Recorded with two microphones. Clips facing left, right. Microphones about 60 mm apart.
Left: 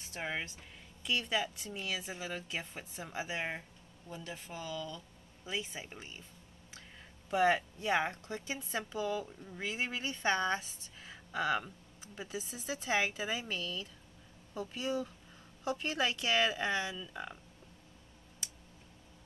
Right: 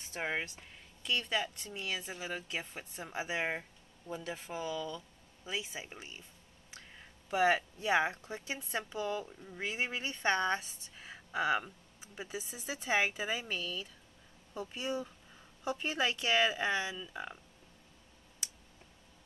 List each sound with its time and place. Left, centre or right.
0.2 s speech: centre
1.0 s speech: centre
3.3 s speech: centre
7.2 s speech: centre
11.0 s speech: centre